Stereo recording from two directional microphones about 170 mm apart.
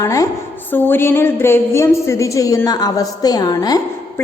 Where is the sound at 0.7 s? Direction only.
10° left (ahead or behind).